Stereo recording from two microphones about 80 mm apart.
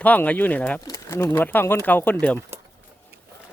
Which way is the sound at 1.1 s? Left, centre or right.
Left.